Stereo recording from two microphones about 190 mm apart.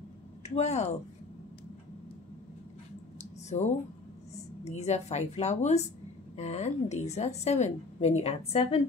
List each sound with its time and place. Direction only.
0.4 s speech: 35° left (ahead or behind)
3.2 s a sound: 35° left (ahead or behind)
4.6 s a woman's voice: 35° left (ahead or behind)